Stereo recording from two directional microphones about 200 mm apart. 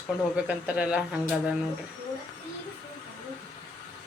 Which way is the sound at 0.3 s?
5° right (ahead or behind).